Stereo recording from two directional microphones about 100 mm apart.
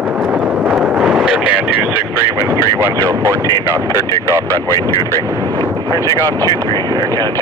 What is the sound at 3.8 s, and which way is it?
Speech, 35° left (ahead or behind).